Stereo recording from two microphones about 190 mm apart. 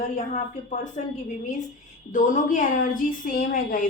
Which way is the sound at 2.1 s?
45° left (ahead or behind).